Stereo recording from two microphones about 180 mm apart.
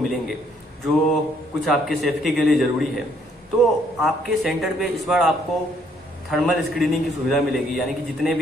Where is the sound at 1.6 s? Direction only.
Centre (ahead or behind).